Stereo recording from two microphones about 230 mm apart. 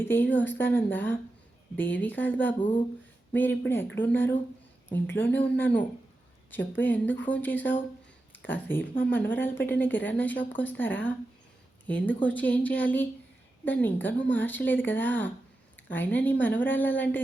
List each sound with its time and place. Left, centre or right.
0.0 s speech: centre
2.6 s speech: left
3.7 s speech: centre
8.3 s a sound: centre
9.0 s speech: centre